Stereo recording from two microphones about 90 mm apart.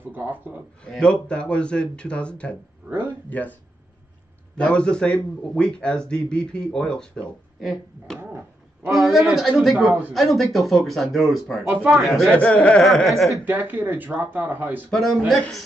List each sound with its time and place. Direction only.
0.1 s speech: 20° right (ahead or behind)
0.8 s a man's voice: 10° left (ahead or behind)
2.9 s speech: 20° right (ahead or behind)
3.3 s speech: 20° left (ahead or behind)
4.6 s a man's voice: 10° left (ahead or behind)
9.8 s speech: 20° right (ahead or behind)
10.1 s speech: centre (ahead or behind)
11.7 s speech: 15° right (ahead or behind)
12.0 s speech: centre (ahead or behind)
12.3 s a man's voice: 15° left (ahead or behind)
12.8 s speech: centre (ahead or behind)
13.5 s speech: 20° right (ahead or behind)
14.9 s speech: centre (ahead or behind)